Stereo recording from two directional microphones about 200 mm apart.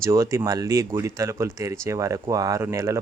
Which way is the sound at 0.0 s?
15° right (ahead or behind).